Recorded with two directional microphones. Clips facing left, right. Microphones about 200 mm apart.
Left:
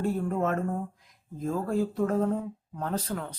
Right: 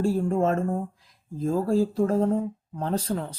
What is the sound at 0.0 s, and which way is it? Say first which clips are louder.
Speech: right 5 dB; 30° right (ahead or behind).